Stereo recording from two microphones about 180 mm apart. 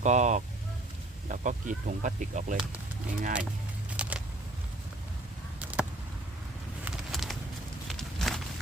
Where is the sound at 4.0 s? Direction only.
5° right (ahead or behind).